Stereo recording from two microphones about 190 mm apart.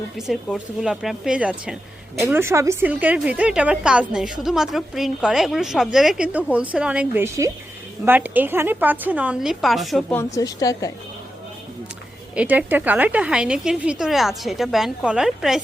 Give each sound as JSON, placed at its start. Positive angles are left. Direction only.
{"t": 0.2, "sound": "a woman's voice", "side_deg": 0}
{"t": 10.2, "sound": "a woman's voice", "side_deg": 15}
{"t": 12.3, "sound": "a woman's voice", "side_deg": -5}